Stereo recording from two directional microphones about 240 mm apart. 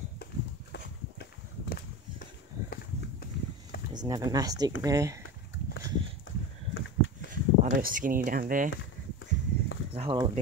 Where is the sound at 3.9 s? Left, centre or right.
Centre.